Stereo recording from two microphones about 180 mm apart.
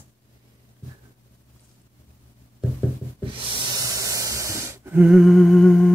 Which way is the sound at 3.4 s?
25° right (ahead or behind).